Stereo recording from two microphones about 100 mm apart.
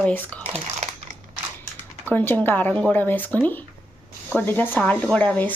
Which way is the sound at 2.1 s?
20° left (ahead or behind).